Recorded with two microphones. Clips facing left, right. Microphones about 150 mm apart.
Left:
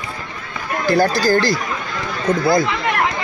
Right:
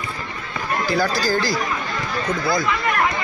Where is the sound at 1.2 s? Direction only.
65° left (ahead or behind).